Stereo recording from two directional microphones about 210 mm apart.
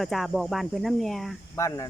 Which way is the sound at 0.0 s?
Centre (ahead or behind).